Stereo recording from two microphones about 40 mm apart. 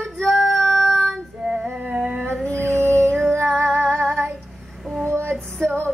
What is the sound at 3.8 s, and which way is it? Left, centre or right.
Female singing, right.